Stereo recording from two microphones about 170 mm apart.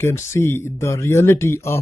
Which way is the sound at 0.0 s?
15° left (ahead or behind).